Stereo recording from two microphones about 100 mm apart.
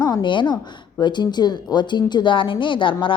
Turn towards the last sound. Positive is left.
turn(degrees=55)  # may be behind; listen again after turning